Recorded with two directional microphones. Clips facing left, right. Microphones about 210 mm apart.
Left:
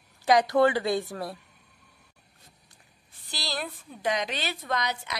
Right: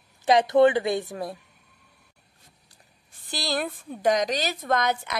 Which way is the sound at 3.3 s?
50° right (ahead or behind).